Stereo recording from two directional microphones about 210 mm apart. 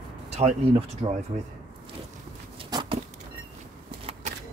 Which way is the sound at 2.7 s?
20° right (ahead or behind).